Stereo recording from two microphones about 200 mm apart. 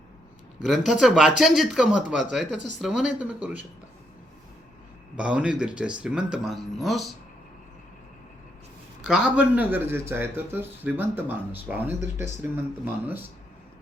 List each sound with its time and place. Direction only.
0.6 s speech: centre (ahead or behind)
5.1 s speech: 5° right (ahead or behind)
9.0 s speech: 5° right (ahead or behind)